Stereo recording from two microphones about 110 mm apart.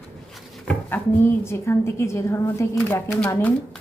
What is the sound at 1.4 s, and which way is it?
Speech, 25° left (ahead or behind).